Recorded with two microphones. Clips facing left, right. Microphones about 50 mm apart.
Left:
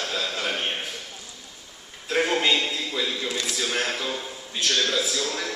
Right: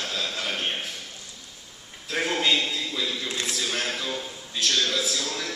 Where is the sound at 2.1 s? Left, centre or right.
Centre.